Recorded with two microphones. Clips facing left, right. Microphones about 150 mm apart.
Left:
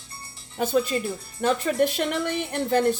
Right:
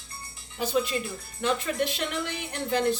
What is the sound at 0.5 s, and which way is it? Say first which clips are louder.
Speech: left 4 dB; 45° left (ahead or behind).